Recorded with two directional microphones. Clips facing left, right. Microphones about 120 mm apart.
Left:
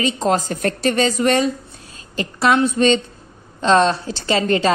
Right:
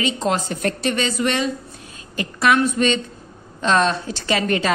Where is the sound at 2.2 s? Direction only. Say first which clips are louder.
Left 1 dB; 30° left (ahead or behind).